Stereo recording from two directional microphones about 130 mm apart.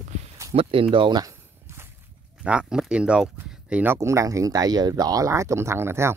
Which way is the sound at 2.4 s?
5° right (ahead or behind).